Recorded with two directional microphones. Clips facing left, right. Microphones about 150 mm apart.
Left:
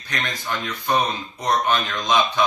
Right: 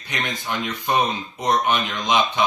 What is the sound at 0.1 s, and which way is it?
Speech, 15° right (ahead or behind).